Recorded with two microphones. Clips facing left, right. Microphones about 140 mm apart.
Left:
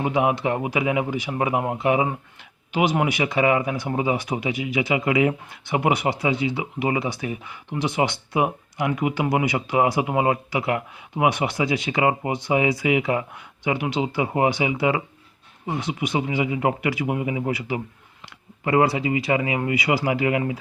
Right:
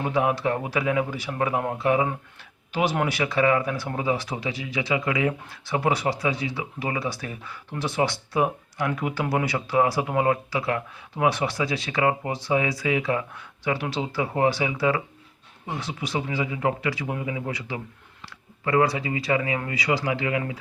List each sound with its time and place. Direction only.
0.0 s speech: 15° left (ahead or behind)